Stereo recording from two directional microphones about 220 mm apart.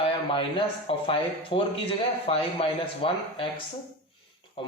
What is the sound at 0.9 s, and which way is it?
Speech, 25° left (ahead or behind).